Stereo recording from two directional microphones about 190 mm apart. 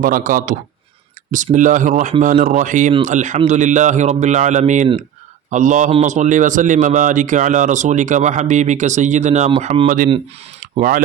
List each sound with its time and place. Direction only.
0.0 s a man's voice: 45° right (ahead or behind)
1.5 s a man's voice: 40° right (ahead or behind)
10.6 s a sound: 45° right (ahead or behind)